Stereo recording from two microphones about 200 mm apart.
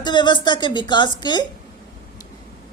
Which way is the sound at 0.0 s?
20° left (ahead or behind).